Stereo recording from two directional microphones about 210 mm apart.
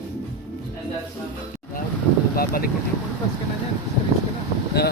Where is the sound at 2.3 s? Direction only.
45° left (ahead or behind).